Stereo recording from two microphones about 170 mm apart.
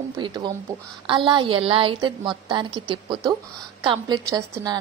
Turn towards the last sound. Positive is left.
turn(degrees=-20)  # may be behind; listen again after turning